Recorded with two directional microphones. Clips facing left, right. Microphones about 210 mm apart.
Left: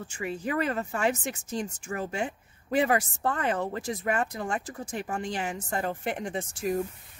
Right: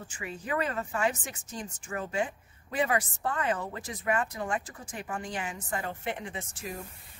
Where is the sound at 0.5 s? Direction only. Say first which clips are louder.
Left 2 dB; 40° left (ahead or behind).